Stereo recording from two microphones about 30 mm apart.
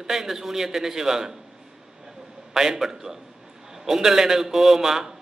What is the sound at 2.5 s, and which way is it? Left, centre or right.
A man's voice, centre.